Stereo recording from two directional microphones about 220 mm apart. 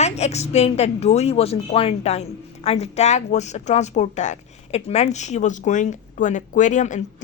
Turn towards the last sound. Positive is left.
turn(degrees=35)  # may be behind; listen again after turning